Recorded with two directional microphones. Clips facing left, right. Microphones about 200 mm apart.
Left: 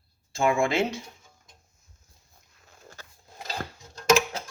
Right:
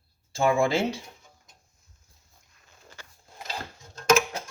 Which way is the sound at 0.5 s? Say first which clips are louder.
Right 1 dB; 30° right (ahead or behind).